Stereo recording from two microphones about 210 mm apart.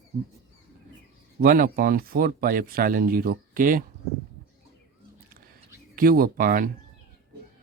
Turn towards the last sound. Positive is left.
turn(degrees=-40)  # may be behind; listen again after turning